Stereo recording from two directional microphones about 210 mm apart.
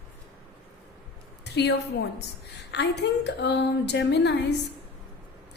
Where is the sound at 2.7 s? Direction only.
55° left (ahead or behind).